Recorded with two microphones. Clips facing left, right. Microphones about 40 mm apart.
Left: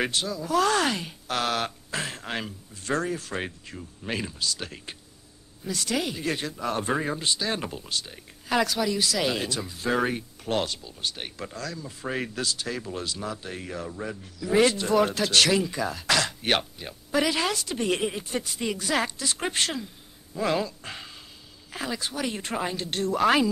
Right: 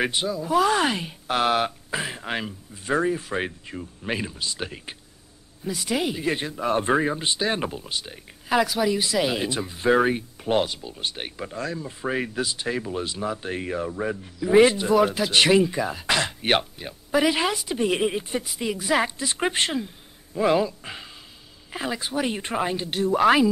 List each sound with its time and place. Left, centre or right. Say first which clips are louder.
0.1 s speech: right 3 dB; centre
9.5 s speech: right 6 dB; right
11.5 s speech: right 5 dB; right
12.1 s speech: right 4 dB; centre
12.4 s speech: right 3 dB; right
14.9 s speech: right 3 dB; centre
15.3 s speech: right 4 dB; right; by 18.9 s centre
18.9 s speech: right 5 dB; centre
21.7 s speech: right 4 dB; centre